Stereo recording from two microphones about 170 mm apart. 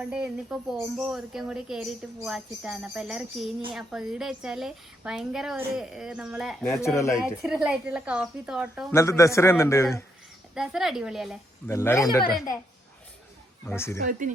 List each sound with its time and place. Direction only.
0.0 s a woman's voice: 5° right (ahead or behind)
6.7 s a man's voice: 15° left (ahead or behind)
7.2 s a woman's voice: 5° right (ahead or behind)
8.9 s a man's voice: 15° left (ahead or behind)
10.5 s a woman's voice: 5° right (ahead or behind)
11.7 s a man's voice: 15° left (ahead or behind)
13.7 s a man's voice: 15° left (ahead or behind)
14.0 s speech: 55° right (ahead or behind)